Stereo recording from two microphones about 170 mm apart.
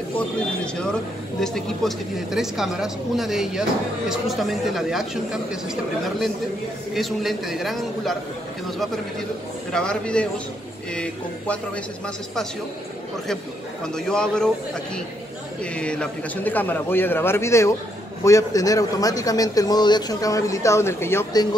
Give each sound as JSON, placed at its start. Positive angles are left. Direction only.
{"t": 1.4, "sound": "speech", "side_deg": 0}
{"t": 9.7, "sound": "a man's voice", "side_deg": 5}
{"t": 13.8, "sound": "speech", "side_deg": 5}
{"t": 15.6, "sound": "a man's voice", "side_deg": 5}